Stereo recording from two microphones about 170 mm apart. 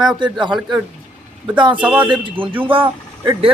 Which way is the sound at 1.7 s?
10° right (ahead or behind).